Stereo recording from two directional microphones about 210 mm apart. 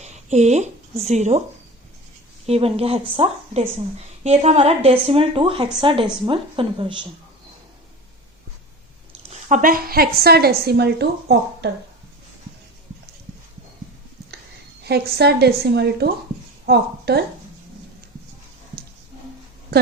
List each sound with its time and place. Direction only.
0.0 s a sound: 35° right (ahead or behind)
1.0 s speech: 30° right (ahead or behind)
2.5 s speech: 30° right (ahead or behind)
9.3 s a woman's voice: 40° right (ahead or behind)
14.8 s a woman's voice: 50° right (ahead or behind)